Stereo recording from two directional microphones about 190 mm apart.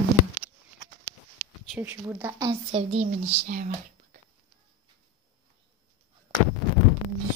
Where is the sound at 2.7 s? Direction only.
35° right (ahead or behind).